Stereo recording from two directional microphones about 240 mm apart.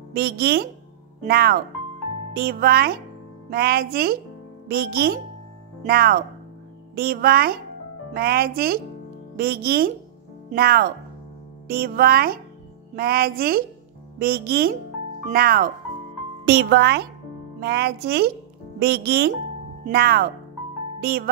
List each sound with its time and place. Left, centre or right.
0.1 s a child's voice: right